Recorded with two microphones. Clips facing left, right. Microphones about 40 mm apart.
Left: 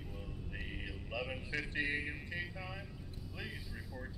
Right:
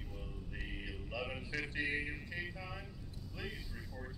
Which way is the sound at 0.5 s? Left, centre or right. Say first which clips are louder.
Even; centre.